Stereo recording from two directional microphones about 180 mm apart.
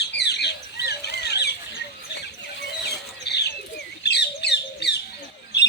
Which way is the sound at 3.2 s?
70° left (ahead or behind).